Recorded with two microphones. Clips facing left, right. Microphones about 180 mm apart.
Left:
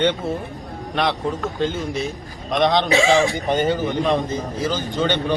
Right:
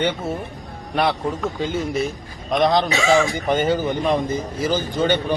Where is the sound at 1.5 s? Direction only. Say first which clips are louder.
Even; 5° right (ahead or behind).